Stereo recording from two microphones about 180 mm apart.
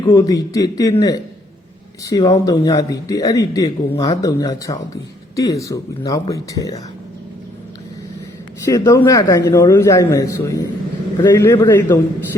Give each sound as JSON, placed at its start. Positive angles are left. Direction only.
{"t": 0.0, "sound": "speech", "side_deg": 20}
{"t": 2.0, "sound": "speech", "side_deg": 20}
{"t": 8.6, "sound": "a man's voice", "side_deg": 15}